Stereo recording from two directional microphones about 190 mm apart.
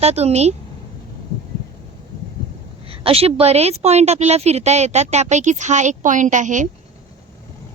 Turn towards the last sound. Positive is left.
turn(degrees=-40)  # may be behind; listen again after turning